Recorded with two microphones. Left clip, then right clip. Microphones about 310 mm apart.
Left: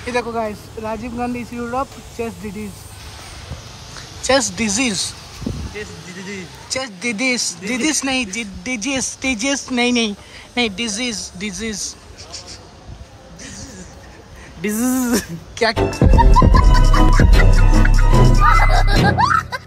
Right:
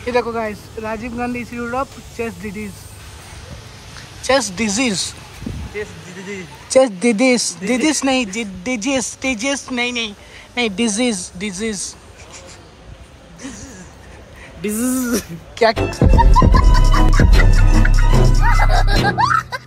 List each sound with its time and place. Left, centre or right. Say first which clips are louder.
0.0 s speech: right 3 dB; centre
0.3 s speech: even; left
1.3 s speech: right 1 dB; centre
1.6 s speech: even; left
2.4 s speech: right 1 dB; centre
3.9 s a woman's voice: even; centre
5.8 s speech: right 2 dB; centre
6.7 s speech: right 10 dB; centre
14.6 s speech: left 1 dB; centre